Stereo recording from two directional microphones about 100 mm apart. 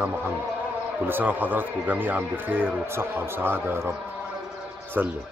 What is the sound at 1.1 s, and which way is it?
A man's voice, 20° right (ahead or behind).